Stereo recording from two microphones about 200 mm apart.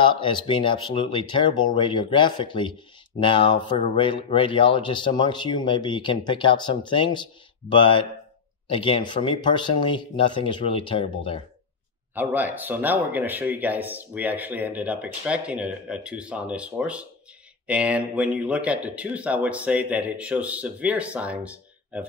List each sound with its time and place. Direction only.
0.0 s speech: 25° left (ahead or behind)
12.1 s speech: 10° right (ahead or behind)